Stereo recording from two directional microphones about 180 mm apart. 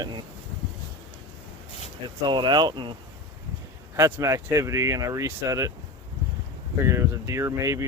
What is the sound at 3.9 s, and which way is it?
Speech, 15° right (ahead or behind).